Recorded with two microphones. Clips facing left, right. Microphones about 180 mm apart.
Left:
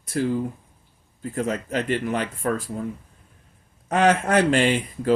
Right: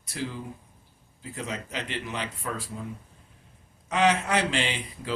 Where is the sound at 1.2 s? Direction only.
50° left (ahead or behind).